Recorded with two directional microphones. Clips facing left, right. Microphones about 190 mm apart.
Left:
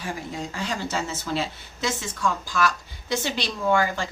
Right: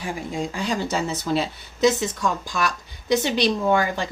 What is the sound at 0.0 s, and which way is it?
Speech, 15° right (ahead or behind).